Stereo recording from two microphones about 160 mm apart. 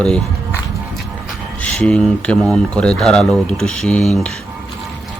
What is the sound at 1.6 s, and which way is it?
Speech, 5° left (ahead or behind).